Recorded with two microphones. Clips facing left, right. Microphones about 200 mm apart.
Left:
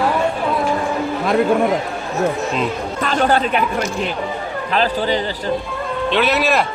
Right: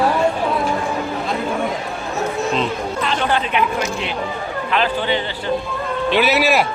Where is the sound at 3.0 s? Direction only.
45° left (ahead or behind).